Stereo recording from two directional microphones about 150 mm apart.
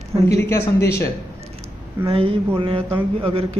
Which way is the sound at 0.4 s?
15° left (ahead or behind).